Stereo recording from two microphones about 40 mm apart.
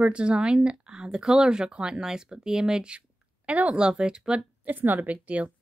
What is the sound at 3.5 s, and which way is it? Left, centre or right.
Speech, right.